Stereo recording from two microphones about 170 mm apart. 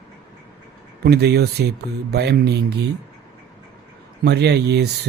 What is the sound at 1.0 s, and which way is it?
Speech, 70° right (ahead or behind).